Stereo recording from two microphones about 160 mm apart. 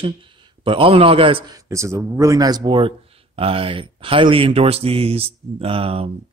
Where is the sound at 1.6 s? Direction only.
20° right (ahead or behind).